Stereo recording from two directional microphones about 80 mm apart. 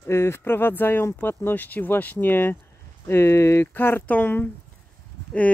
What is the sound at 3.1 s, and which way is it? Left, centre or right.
Speech, left.